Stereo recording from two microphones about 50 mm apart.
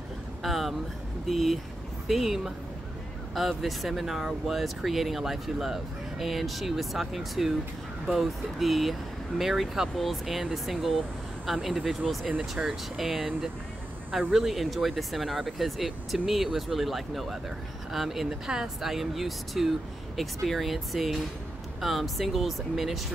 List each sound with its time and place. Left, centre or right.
0.4 s a sound: centre
1.3 s a woman's voice: centre
12.4 s a woman's voice: centre
12.9 s speech: centre
14.3 s speech: centre